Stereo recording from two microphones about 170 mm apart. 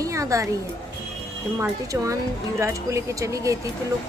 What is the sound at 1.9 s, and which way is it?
Speech, 15° right (ahead or behind).